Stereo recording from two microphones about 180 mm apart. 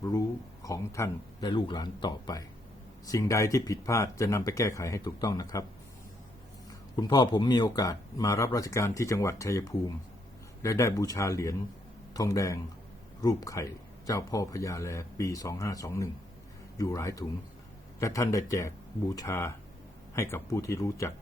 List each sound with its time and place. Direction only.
0.0 s speech: 20° left (ahead or behind)
6.7 s speech: 20° left (ahead or behind)